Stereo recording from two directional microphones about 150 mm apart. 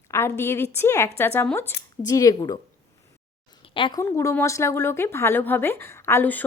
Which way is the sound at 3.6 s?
35° left (ahead or behind).